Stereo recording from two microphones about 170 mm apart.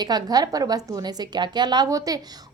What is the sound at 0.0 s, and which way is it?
A woman's voice, 25° right (ahead or behind).